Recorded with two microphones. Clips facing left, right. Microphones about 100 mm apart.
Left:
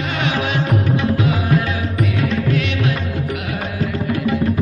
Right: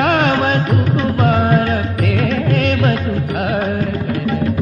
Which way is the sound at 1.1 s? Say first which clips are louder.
Right 4 dB; 50° right (ahead or behind).